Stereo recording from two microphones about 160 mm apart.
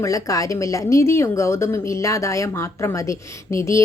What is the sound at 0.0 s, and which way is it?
A woman's voice, 20° left (ahead or behind).